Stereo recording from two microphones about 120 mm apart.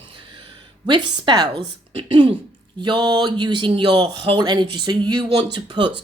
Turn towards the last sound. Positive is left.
turn(degrees=-40)  # may be behind; listen again after turning